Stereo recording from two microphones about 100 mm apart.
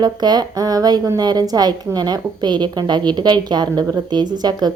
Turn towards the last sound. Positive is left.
turn(degrees=-45)  # may be behind; listen again after turning